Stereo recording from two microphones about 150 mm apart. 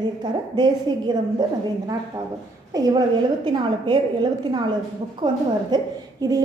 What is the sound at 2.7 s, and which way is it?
A woman's voice, 25° right (ahead or behind).